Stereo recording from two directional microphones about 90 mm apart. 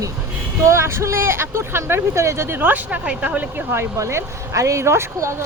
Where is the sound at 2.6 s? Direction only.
15° right (ahead or behind).